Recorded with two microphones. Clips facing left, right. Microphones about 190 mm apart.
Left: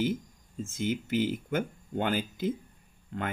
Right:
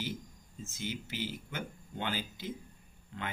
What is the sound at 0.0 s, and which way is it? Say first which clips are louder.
Speech: left 10 dB; 50° left (ahead or behind).